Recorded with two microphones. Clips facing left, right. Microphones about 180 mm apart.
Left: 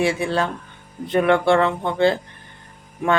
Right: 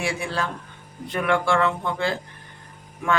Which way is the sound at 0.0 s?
25° left (ahead or behind).